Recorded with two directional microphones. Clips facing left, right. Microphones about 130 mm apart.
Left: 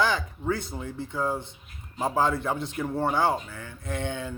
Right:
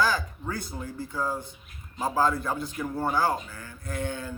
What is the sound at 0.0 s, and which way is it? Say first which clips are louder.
Speech: left 1 dB; 20° left (ahead or behind).